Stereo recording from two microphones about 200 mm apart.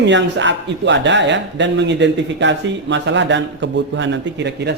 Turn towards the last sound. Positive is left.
turn(degrees=-60)  # may be behind; listen again after turning